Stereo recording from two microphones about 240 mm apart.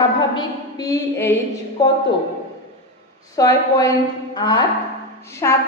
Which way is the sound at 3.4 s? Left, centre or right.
Centre.